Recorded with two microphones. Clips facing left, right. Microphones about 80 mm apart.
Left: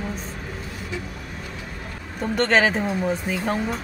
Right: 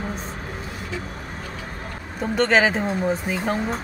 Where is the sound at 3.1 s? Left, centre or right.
Centre.